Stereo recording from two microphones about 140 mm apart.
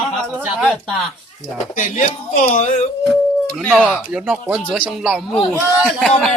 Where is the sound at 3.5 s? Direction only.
5° left (ahead or behind).